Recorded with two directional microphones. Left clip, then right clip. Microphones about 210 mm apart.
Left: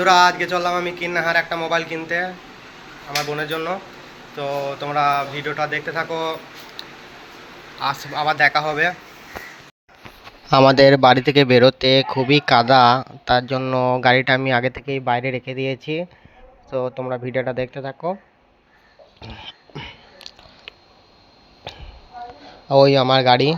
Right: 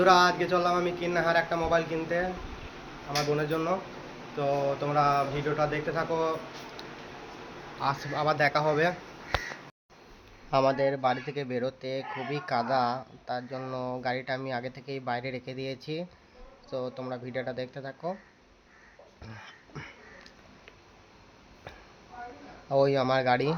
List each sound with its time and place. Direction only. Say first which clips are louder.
0.0 s speech: left 7 dB; centre (ahead or behind)
6.8 s a sound: left 7 dB; centre (ahead or behind)
7.8 s speech: left 7 dB; centre (ahead or behind)
10.5 s speech: left 14 dB; 40° left (ahead or behind)
19.2 s throat clearing: left 11 dB; 20° left (ahead or behind)
21.7 s a sound: left 11 dB; 25° left (ahead or behind)
22.7 s speech: left 11 dB; 30° left (ahead or behind)